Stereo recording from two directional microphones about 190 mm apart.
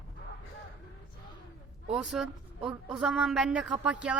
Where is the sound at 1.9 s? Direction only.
5° right (ahead or behind).